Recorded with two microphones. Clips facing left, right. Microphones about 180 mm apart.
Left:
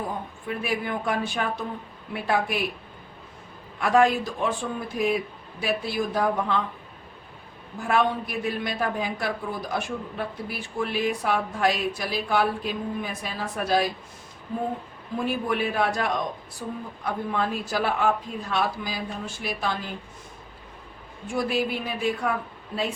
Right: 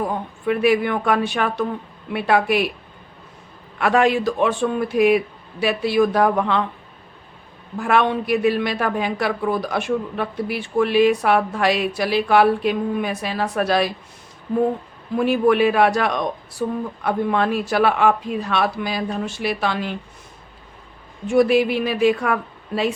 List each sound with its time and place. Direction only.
0.4 s a woman's voice: 75° right (ahead or behind)
3.8 s a woman's voice: 75° right (ahead or behind)
7.8 s a woman's voice: 75° right (ahead or behind)
15.2 s a woman's voice: 75° right (ahead or behind)
21.2 s a woman's voice: 75° right (ahead or behind)